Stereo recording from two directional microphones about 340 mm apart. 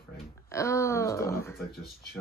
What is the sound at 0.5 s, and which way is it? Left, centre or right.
Speech, centre.